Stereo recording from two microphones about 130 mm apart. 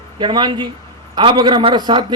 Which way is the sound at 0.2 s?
35° right (ahead or behind).